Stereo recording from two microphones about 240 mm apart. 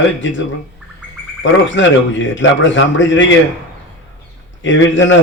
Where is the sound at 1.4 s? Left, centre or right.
Left.